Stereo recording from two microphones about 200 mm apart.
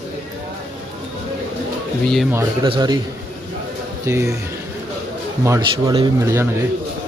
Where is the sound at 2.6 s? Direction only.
20° right (ahead or behind).